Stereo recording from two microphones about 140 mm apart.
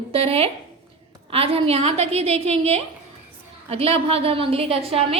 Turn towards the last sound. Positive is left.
turn(degrees=-45)  # may be behind; listen again after turning